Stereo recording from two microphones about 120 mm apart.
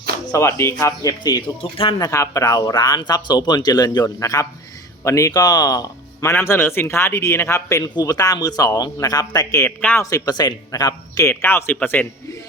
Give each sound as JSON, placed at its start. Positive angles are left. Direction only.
{"t": 0.3, "sound": "speech", "side_deg": 25}
{"t": 2.0, "sound": "speech", "side_deg": 25}
{"t": 6.3, "sound": "a man's voice", "side_deg": 20}
{"t": 11.3, "sound": "a man's voice", "side_deg": 20}